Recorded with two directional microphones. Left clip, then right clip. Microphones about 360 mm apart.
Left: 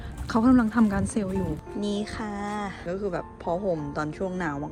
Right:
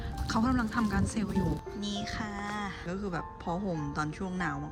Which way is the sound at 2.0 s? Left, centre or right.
Centre.